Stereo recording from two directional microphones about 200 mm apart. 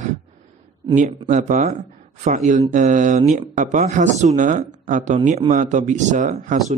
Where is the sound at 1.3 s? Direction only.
40° right (ahead or behind).